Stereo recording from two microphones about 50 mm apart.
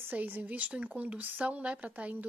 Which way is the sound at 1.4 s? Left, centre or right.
Right.